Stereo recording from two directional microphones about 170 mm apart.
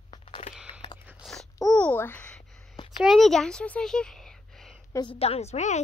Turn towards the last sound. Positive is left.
turn(degrees=40)  # may be behind; listen again after turning